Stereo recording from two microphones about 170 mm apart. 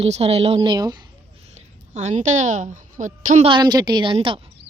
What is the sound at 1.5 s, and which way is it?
A woman's voice, 45° right (ahead or behind).